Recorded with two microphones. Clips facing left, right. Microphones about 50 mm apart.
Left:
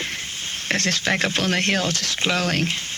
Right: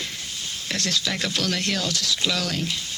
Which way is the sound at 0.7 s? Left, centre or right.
Left.